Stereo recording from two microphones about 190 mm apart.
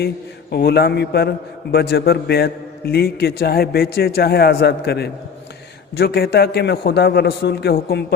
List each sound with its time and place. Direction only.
0.5 s a man's voice: 60° left (ahead or behind)